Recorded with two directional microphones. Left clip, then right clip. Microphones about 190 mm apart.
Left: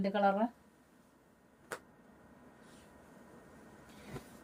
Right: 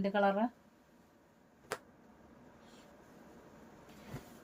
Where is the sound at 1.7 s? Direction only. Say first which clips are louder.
Right 2 dB; 50° right (ahead or behind).